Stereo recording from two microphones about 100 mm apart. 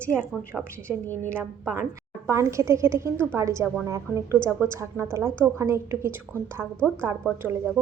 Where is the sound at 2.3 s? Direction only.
30° right (ahead or behind).